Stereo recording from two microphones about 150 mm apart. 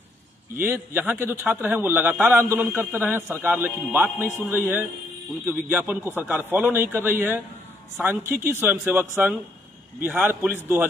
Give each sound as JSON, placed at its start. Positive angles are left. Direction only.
{"t": 0.6, "sound": "a man's voice", "side_deg": -15}